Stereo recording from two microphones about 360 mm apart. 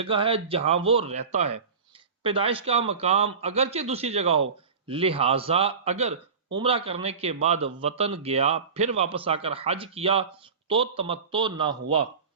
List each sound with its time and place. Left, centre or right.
0.0 s a man's voice: centre